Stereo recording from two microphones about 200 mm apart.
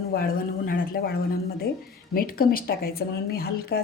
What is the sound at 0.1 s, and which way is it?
Speech, 45° left (ahead or behind).